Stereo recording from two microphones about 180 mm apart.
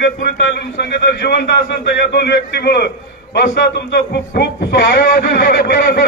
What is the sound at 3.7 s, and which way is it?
Music, 70° left (ahead or behind).